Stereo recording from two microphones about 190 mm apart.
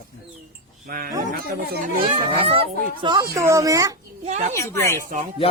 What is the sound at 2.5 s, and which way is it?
Speech, 30° right (ahead or behind).